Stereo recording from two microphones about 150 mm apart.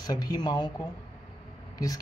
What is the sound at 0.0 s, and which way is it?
Speech, 25° left (ahead or behind).